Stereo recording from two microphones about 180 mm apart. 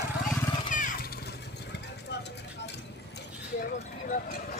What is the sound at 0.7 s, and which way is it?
Vehicle, 45° left (ahead or behind).